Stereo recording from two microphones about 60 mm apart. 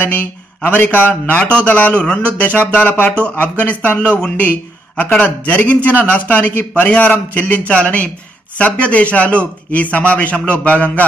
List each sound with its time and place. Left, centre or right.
0.0 s a man's voice: left